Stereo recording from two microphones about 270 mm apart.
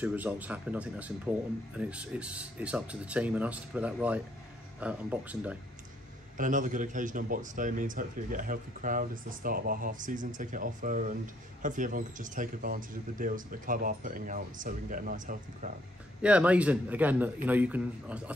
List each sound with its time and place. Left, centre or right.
0.0 s speech: centre
6.3 s a man's voice: right
16.2 s speech: centre